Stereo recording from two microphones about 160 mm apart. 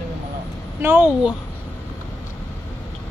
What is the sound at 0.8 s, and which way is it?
Speech, 5° right (ahead or behind).